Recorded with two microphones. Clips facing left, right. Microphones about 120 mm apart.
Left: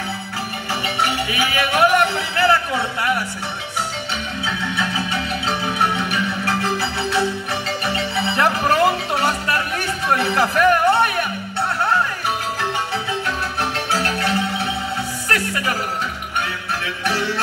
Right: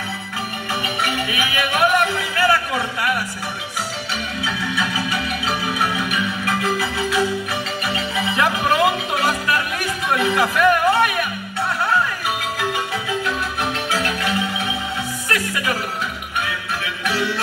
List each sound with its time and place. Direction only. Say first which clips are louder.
0.8 s music: left 3 dB; 30° left (ahead or behind)
4.7 s music: even; 30° left (ahead or behind)
8.8 s a sound: left 1 dB; 30° left (ahead or behind)
10.0 s speech: even; 35° left (ahead or behind)
13.8 s marimba: left 3 dB; 35° left (ahead or behind)
15.2 s music: even; 40° left (ahead or behind)